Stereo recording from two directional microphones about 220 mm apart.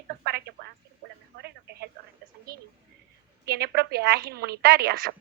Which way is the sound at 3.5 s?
45° right (ahead or behind).